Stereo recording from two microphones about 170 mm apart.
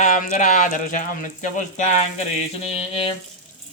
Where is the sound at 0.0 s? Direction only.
50° left (ahead or behind).